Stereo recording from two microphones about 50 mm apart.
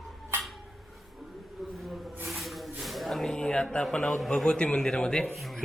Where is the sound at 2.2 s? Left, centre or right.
Centre.